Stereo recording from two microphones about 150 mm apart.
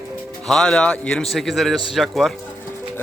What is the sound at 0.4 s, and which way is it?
A man's voice, 5° left (ahead or behind).